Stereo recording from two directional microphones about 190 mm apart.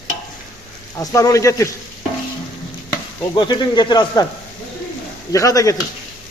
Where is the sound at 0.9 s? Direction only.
15° left (ahead or behind).